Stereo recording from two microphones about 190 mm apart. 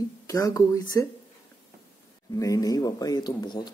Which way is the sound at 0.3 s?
15° left (ahead or behind).